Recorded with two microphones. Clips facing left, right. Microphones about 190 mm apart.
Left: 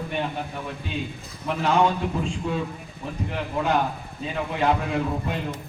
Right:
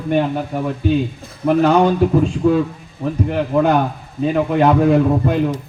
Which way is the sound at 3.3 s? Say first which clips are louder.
Right 8 dB; 60° right (ahead or behind).